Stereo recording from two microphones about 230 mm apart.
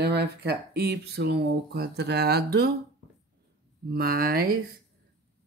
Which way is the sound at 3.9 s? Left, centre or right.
Right.